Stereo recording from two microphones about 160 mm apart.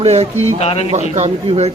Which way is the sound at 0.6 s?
40° left (ahead or behind).